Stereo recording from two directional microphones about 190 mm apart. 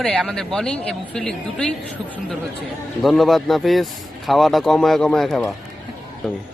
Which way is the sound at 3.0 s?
Centre (ahead or behind).